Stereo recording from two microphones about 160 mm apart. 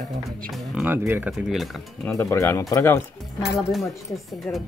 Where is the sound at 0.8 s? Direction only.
10° right (ahead or behind).